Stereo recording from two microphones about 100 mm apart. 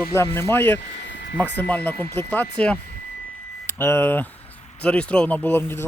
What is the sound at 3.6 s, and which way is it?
Speech, 25° left (ahead or behind).